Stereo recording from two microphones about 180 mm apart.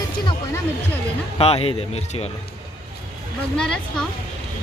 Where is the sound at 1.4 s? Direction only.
35° left (ahead or behind).